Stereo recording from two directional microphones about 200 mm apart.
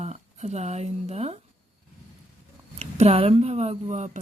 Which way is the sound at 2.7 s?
30° right (ahead or behind).